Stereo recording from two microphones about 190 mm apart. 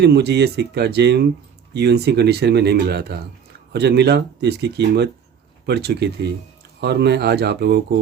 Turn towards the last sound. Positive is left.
turn(degrees=-60)  # may be behind; listen again after turning